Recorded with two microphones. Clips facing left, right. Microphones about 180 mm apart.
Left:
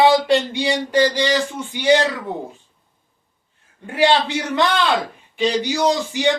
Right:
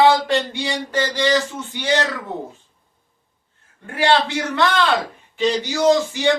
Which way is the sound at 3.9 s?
15° left (ahead or behind).